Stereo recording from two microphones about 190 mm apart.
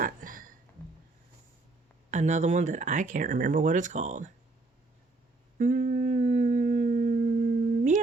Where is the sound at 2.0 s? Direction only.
40° right (ahead or behind).